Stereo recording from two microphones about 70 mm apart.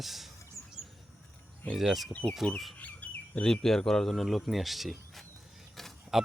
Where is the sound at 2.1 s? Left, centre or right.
Centre.